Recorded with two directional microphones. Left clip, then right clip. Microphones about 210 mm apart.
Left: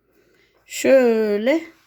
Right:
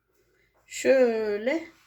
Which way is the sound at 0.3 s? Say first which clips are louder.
Left 7 dB; 45° left (ahead or behind).